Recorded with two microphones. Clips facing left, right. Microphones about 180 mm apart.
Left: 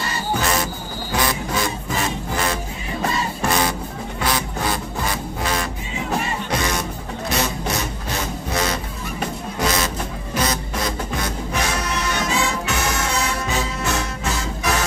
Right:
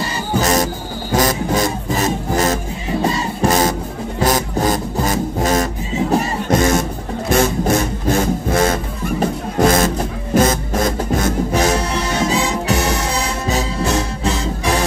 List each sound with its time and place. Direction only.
0.4 s music: 40° right (ahead or behind)
11.7 s music: 30° right (ahead or behind)